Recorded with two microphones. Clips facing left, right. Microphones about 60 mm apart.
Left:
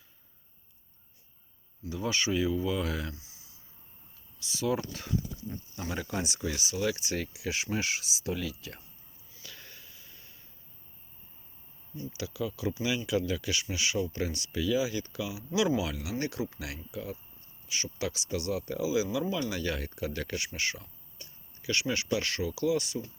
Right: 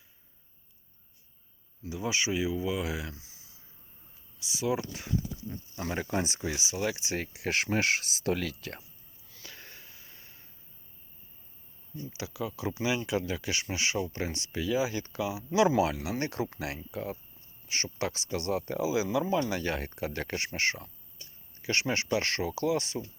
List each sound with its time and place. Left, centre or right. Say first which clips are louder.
1.9 s speech: even; centre
4.4 s speech: even; centre
5.8 s speech: right 3 dB; right
7.4 s speech: right 7 dB; right
9.4 s a sound: right 1 dB; right
12.1 s speech: left 1 dB; right